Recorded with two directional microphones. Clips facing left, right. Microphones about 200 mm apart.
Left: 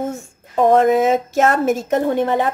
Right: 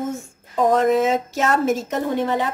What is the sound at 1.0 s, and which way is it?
Speech, 55° left (ahead or behind).